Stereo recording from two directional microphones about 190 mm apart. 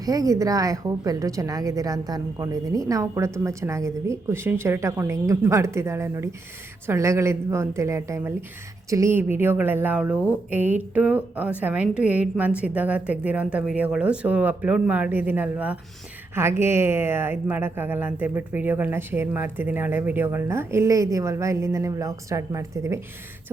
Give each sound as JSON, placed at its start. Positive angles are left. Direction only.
{"t": 0.0, "sound": "speech", "side_deg": -20}